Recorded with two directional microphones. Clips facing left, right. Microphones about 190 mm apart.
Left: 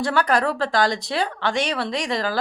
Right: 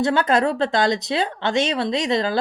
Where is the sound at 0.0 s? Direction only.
25° right (ahead or behind).